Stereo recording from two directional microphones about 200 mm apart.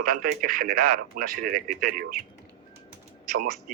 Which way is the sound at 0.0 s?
45° right (ahead or behind).